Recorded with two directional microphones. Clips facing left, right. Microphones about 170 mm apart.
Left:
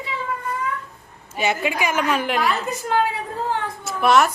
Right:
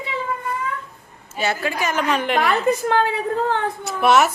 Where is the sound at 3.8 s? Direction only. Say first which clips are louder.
Even; centre (ahead or behind).